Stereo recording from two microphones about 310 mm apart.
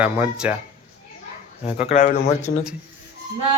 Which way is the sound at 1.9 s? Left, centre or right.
Left.